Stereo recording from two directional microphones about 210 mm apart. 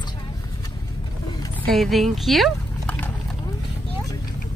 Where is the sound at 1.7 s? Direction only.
Centre (ahead or behind).